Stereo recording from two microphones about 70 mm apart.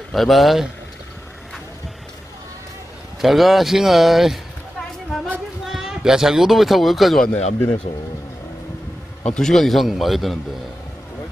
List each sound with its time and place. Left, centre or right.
0.1 s a man's voice: centre
3.2 s a man's voice: centre
5.7 s speech: centre
7.5 s speech: left
9.3 s a man's voice: centre